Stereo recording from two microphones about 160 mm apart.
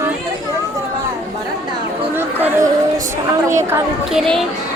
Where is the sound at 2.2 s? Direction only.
10° right (ahead or behind).